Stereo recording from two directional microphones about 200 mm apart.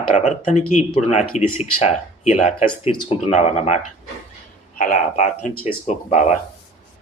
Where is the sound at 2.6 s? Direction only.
25° left (ahead or behind).